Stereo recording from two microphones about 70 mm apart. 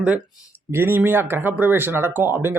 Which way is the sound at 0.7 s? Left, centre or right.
Right.